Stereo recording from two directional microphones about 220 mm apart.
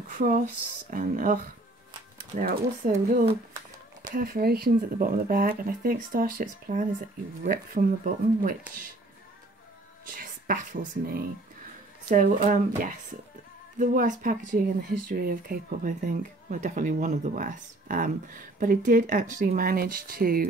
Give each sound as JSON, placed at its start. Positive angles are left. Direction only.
{"t": 0.1, "sound": "speech", "side_deg": -35}
{"t": 10.0, "sound": "speech", "side_deg": -40}